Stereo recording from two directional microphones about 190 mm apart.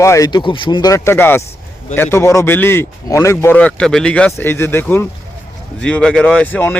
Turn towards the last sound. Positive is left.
turn(degrees=10)  # may be behind; listen again after turning